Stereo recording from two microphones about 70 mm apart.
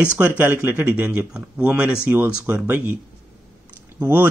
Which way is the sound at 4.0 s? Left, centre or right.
Right.